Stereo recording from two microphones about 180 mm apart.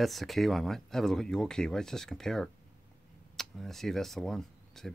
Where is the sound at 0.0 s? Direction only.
Centre (ahead or behind).